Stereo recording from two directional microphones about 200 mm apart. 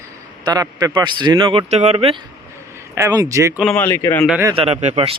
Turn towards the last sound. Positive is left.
turn(degrees=-30)  # may be behind; listen again after turning